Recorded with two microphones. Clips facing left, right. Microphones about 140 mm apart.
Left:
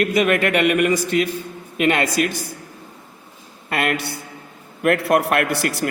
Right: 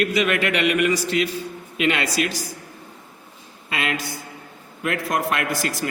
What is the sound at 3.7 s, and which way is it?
A man's voice, 55° left (ahead or behind).